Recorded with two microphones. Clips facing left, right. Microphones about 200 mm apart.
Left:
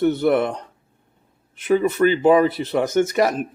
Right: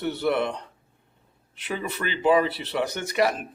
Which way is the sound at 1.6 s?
45° left (ahead or behind).